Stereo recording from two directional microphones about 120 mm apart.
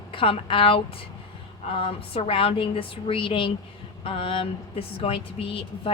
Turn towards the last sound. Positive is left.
turn(degrees=50)  # may be behind; listen again after turning